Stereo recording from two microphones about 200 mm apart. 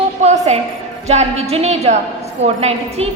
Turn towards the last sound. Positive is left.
turn(degrees=-30)  # may be behind; listen again after turning